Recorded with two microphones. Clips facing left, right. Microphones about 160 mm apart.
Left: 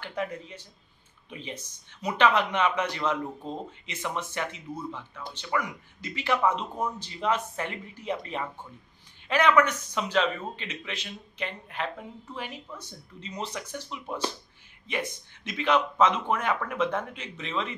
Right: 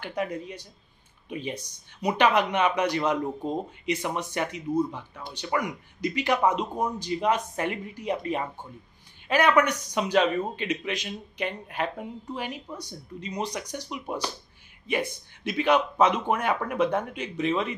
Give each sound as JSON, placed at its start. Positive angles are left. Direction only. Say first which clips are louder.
{"t": 0.0, "sound": "speech", "louder": "right 3 dB", "side_deg": -15}